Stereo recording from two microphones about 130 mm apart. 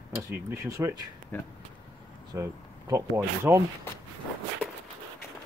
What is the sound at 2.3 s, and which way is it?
Speech, 25° right (ahead or behind).